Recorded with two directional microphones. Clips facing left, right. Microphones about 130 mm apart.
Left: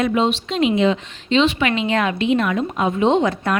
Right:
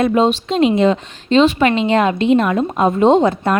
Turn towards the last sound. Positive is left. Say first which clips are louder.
# right 4 dB
turn(degrees=-30)  # may be behind; listen again after turning